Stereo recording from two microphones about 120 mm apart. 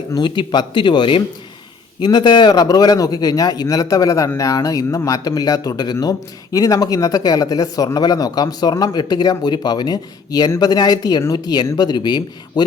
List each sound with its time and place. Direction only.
0.1 s a man's voice: 40° left (ahead or behind)